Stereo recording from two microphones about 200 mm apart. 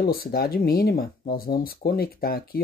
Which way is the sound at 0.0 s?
50° left (ahead or behind).